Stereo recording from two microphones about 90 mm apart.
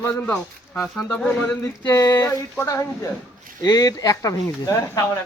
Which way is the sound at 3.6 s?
45° left (ahead or behind).